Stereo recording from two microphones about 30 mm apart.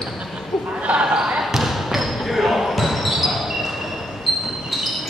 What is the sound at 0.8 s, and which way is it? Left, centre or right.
Basketball bounce, right.